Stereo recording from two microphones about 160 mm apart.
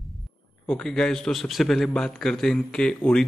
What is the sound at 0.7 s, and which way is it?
Speech, 5° left (ahead or behind).